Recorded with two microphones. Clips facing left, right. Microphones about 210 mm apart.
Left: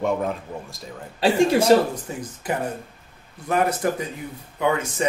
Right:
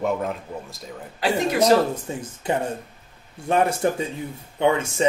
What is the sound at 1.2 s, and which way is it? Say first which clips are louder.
Speech: left 3 dB; 30° left (ahead or behind).